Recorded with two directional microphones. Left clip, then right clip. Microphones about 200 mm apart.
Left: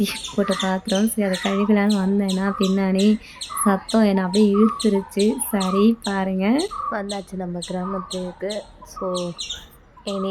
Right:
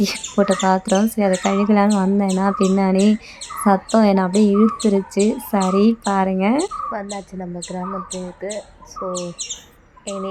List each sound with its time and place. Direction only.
0.0 s speech: 10° right (ahead or behind)
6.9 s speech: 10° left (ahead or behind)